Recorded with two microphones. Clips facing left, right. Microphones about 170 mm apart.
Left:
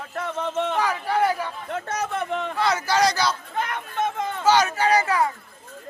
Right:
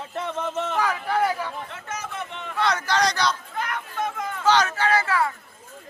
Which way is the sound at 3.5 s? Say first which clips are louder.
Left 2 dB; 25° left (ahead or behind).